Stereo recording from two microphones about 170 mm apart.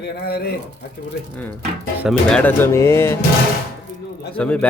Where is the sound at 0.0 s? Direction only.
70° left (ahead or behind).